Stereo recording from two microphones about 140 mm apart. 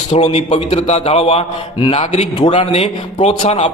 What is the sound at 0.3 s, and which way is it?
A man's voice, 45° left (ahead or behind).